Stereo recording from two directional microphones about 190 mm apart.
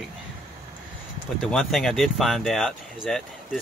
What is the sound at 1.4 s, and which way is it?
Speech, centre (ahead or behind).